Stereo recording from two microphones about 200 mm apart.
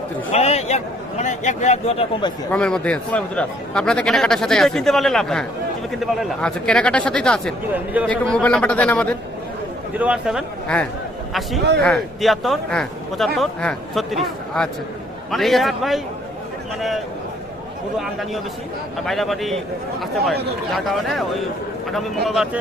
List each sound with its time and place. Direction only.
0.3 s a man's voice: 30° left (ahead or behind)
2.5 s a man's voice: 5° left (ahead or behind)
10.0 s a man's voice: 5° right (ahead or behind)
17.9 s a man's voice: centre (ahead or behind)